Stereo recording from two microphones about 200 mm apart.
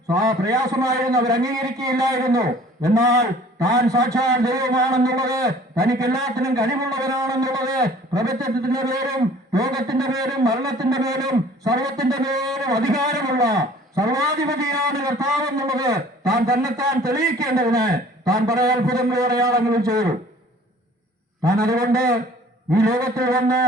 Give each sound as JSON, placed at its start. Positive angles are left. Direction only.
{"t": 0.1, "sound": "a man's voice", "side_deg": -15}
{"t": 21.4, "sound": "a man's voice", "side_deg": -15}